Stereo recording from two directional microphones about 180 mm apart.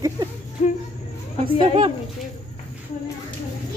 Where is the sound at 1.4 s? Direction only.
25° right (ahead or behind).